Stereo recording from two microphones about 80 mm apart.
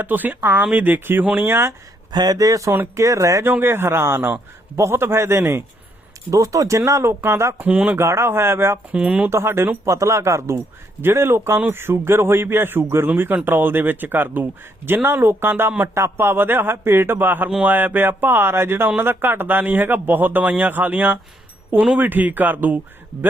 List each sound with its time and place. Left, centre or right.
0.0 s speech: right
2.1 s speech: right
3.4 s speech: right
6.3 s speech: right
7.7 s speech: centre
7.9 s speech: right
8.9 s speech: centre
9.3 s speech: right